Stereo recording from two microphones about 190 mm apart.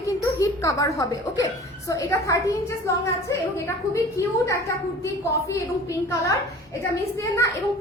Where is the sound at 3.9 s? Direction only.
15° left (ahead or behind).